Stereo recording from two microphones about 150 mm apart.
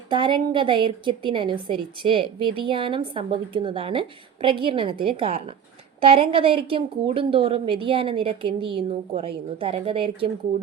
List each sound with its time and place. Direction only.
0.1 s a woman's voice: 30° right (ahead or behind)